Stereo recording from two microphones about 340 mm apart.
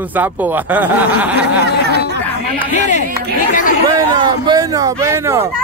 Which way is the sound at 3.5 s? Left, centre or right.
Left.